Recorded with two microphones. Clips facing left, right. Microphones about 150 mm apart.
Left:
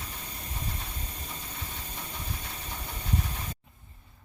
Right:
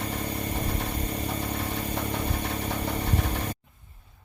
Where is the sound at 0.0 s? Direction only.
75° right (ahead or behind).